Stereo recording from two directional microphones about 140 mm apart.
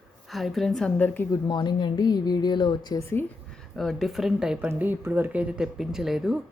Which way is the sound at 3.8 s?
Centre (ahead or behind).